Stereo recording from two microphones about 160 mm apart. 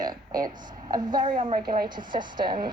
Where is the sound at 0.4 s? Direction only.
25° right (ahead or behind).